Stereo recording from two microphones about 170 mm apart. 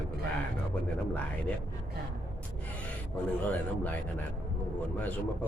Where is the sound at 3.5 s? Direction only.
10° left (ahead or behind).